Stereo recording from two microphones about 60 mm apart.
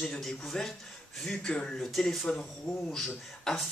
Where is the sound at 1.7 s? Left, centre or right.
Centre.